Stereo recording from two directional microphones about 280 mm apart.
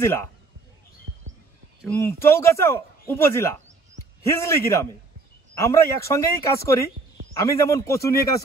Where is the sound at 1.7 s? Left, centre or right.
Centre.